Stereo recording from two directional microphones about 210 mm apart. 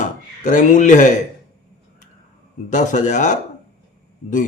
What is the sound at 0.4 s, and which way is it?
Speech, 35° left (ahead or behind).